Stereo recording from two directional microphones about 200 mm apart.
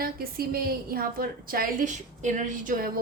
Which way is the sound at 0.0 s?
50° right (ahead or behind).